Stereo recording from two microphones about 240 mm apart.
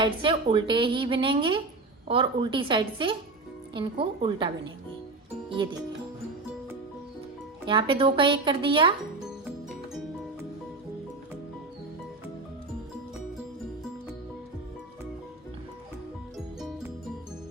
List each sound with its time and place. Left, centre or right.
0.0 s a woman's voice: right
7.7 s a woman's voice: right
16.6 s music: centre